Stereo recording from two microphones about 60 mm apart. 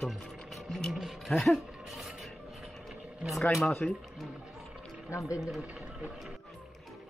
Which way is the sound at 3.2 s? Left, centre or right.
Centre.